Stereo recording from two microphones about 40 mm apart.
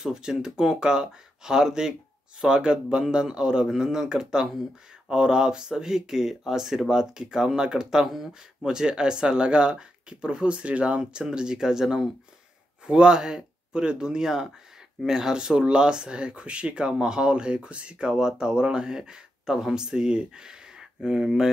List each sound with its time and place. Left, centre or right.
0.0 s speech: centre
18.1 s speech: centre